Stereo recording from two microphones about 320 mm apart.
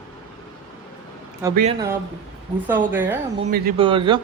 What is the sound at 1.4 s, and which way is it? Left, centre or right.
Speech, centre.